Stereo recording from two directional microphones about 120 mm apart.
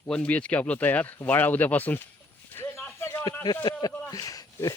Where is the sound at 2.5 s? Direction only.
20° left (ahead or behind).